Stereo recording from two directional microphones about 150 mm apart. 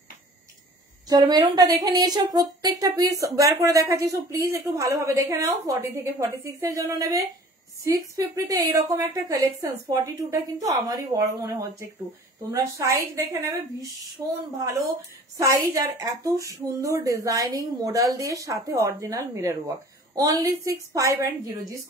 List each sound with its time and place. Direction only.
1.0 s a woman's voice: 25° right (ahead or behind)